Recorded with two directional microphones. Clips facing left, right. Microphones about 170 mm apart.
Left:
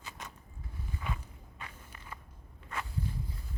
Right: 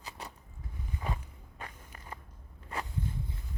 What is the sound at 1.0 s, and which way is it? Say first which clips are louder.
Walk: right 3 dB; 40° right (ahead or behind).